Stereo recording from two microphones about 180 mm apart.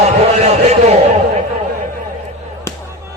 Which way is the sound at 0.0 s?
35° right (ahead or behind).